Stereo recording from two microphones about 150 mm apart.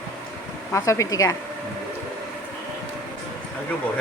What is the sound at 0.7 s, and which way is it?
Speech, 20° left (ahead or behind).